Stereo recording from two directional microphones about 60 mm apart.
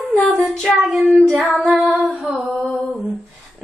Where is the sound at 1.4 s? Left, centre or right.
Centre.